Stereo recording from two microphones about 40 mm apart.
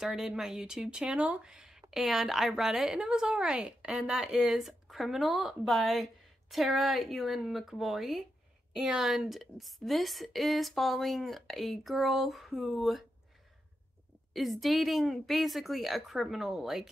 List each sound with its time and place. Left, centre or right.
0.0 s speech: centre
4.5 s a woman's voice: centre
14.3 s a woman's voice: centre